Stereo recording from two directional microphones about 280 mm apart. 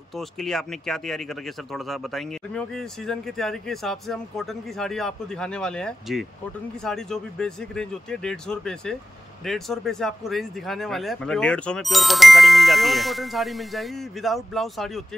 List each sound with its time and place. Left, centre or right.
0.1 s speech: centre